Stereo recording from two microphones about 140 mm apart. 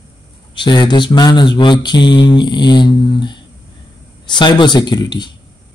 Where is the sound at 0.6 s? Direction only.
30° left (ahead or behind).